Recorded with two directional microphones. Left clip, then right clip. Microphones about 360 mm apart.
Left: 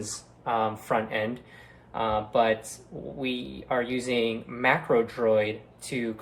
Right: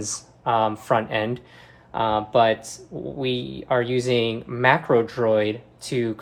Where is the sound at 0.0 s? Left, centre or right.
Right.